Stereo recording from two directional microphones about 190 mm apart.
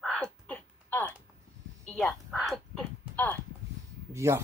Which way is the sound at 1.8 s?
Centre (ahead or behind).